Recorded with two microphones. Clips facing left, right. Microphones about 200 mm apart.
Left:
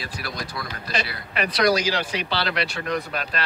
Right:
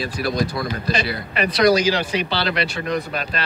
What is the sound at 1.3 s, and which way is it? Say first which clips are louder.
Speech: right 4 dB; centre (ahead or behind).